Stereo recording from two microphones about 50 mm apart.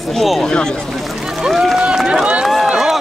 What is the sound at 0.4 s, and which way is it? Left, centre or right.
Speech, centre.